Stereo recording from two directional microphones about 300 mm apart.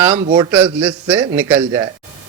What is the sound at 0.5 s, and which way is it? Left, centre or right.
A man's voice, centre.